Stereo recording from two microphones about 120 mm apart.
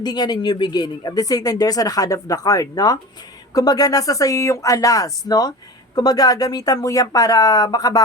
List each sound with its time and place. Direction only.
0.0 s speech: 35° left (ahead or behind)